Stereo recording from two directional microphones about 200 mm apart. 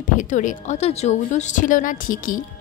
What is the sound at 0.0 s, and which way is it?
A woman's voice, 40° left (ahead or behind).